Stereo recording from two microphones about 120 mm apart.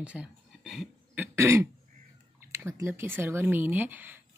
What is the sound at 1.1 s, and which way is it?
Cough, 15° right (ahead or behind).